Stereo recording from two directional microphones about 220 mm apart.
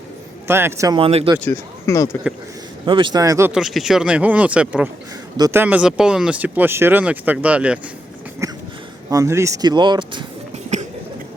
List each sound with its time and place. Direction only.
0.4 s speech: 10° right (ahead or behind)
1.4 s speech: 10° left (ahead or behind)
2.8 s speech: 20° right (ahead or behind); by 7.8 s 5° right (ahead or behind)
8.4 s a sound: 15° right (ahead or behind)
9.0 s speech: 15° right (ahead or behind)